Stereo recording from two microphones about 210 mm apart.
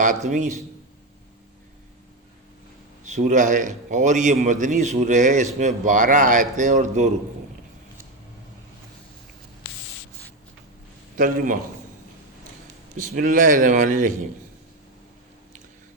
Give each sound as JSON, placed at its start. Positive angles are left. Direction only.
{"t": 0.0, "sound": "a man's voice", "side_deg": -35}
{"t": 3.0, "sound": "a man's voice", "side_deg": -35}
{"t": 11.2, "sound": "a man's voice", "side_deg": -40}
{"t": 13.0, "sound": "a man's voice", "side_deg": -40}